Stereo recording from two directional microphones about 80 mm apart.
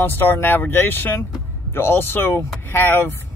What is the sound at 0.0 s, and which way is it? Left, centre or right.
Speech, left.